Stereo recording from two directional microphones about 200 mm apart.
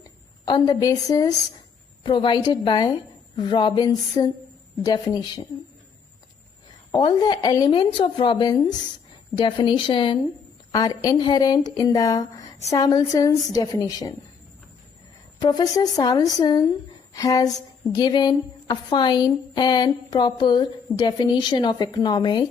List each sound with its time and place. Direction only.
0.4 s a woman's voice: 20° left (ahead or behind)
6.9 s a woman's voice: 20° left (ahead or behind)
15.4 s a woman's voice: 20° left (ahead or behind)